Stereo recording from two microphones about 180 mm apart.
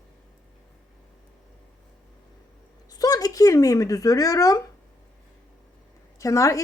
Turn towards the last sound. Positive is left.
turn(degrees=15)  # may be behind; listen again after turning